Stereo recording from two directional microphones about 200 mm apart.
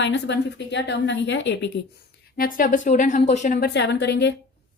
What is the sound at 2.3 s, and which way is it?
A woman's voice, 45° left (ahead or behind).